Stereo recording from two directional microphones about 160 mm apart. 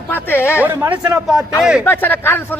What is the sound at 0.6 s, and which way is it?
A man's voice, 10° right (ahead or behind).